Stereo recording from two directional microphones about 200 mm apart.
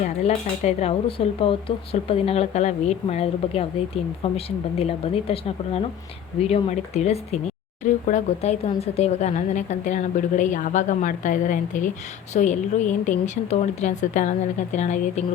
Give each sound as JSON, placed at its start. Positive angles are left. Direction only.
{"t": 0.0, "sound": "speech", "side_deg": 35}